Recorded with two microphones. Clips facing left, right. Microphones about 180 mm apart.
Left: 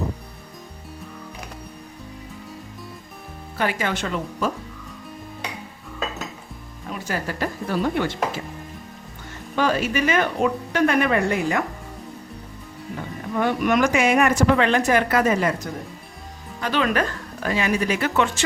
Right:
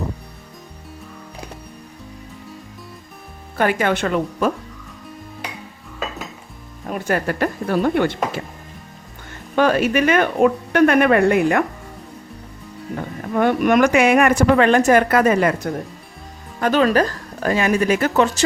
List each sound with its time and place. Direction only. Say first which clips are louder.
3.6 s a woman's voice: right 6 dB; 55° right (ahead or behind)
6.8 s a woman's voice: right 7 dB; 55° right (ahead or behind)
9.6 s a woman's voice: right 5 dB; 60° right (ahead or behind)
13.3 s a woman's voice: right 5 dB; 55° right (ahead or behind)
16.6 s speech: right 6 dB; 50° right (ahead or behind)
16.8 s speech: right 6 dB; 35° right (ahead or behind)